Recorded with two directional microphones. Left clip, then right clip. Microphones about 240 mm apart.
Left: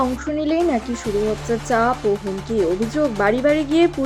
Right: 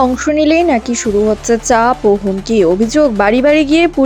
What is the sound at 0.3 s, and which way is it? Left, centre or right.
Speech, right.